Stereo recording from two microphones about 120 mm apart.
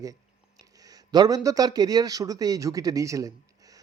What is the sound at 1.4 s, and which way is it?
Speech, 30° right (ahead or behind).